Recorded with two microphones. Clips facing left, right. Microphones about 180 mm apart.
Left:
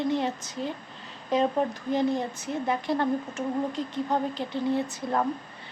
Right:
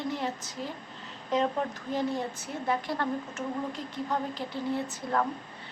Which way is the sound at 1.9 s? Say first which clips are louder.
Left 4 dB; 15° left (ahead or behind).